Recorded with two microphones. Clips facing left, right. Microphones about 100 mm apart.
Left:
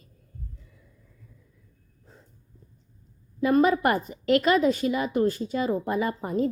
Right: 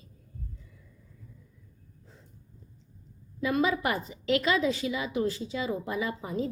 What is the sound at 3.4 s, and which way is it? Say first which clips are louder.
A woman's voice: left 6 dB; 45° left (ahead or behind).